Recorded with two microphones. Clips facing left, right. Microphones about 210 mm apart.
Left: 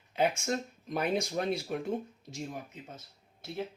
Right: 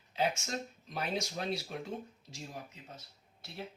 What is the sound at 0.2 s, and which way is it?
Speech, 55° left (ahead or behind).